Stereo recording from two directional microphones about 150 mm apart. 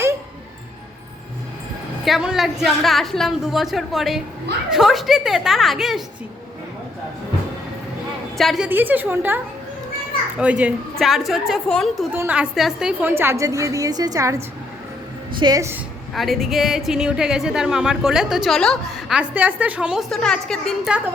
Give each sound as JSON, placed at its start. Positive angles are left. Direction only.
{"t": 2.0, "sound": "a woman's voice", "side_deg": 0}
{"t": 8.4, "sound": "a woman's voice", "side_deg": 0}
{"t": 12.1, "sound": "a woman's voice", "side_deg": -10}
{"t": 16.1, "sound": "a woman's voice", "side_deg": 0}